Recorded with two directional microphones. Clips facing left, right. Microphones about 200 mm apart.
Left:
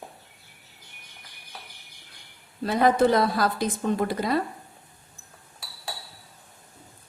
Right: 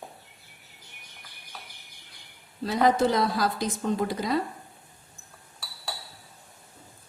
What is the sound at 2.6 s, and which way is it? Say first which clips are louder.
A woman's voice: left 2 dB; 55° left (ahead or behind).